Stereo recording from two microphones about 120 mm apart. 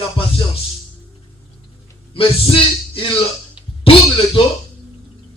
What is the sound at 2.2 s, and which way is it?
Speech, 50° left (ahead or behind).